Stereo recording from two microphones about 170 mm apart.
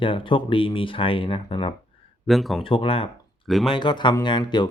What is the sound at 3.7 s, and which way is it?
Speech, 25° left (ahead or behind).